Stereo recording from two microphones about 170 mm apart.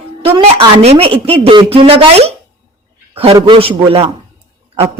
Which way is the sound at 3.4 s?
30° right (ahead or behind).